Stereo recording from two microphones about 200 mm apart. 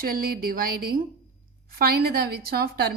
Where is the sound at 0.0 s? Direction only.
45° right (ahead or behind).